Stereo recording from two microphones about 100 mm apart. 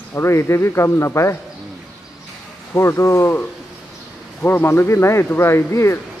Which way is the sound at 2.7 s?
25° left (ahead or behind).